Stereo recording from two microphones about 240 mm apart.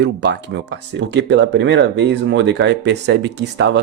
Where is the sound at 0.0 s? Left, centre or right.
Right.